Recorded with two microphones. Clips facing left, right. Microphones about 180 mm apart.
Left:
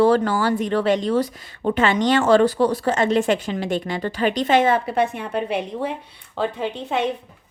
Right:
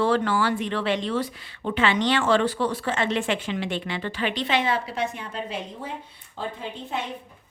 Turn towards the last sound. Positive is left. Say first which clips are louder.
# left 8 dB
turn(degrees=75)  # may be behind; listen again after turning